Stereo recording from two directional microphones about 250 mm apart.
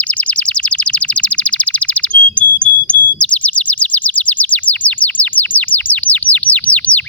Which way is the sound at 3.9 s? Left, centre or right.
Centre.